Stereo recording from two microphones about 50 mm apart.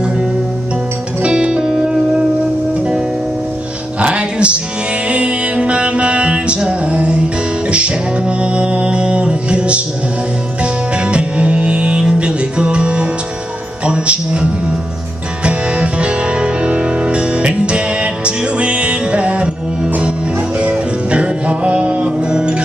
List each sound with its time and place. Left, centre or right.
1.2 s music: centre
4.0 s music: right
13.8 s speech: right
15.4 s music: right
20.5 s music: right